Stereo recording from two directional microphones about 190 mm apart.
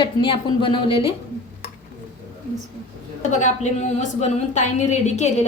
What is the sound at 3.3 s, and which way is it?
A woman's voice, 40° left (ahead or behind).